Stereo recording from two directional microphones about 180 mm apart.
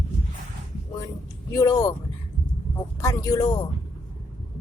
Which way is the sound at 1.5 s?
20° left (ahead or behind).